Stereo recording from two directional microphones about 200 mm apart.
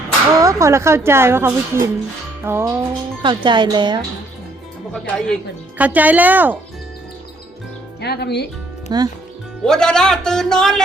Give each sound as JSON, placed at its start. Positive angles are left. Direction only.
{"t": 0.3, "sound": "speech", "side_deg": -15}
{"t": 3.2, "sound": "speech", "side_deg": -25}
{"t": 4.9, "sound": "speech", "side_deg": 5}
{"t": 5.7, "sound": "speech", "side_deg": -10}
{"t": 8.0, "sound": "speech", "side_deg": 55}
{"t": 8.9, "sound": "speech", "side_deg": -20}
{"t": 9.6, "sound": "speech", "side_deg": 5}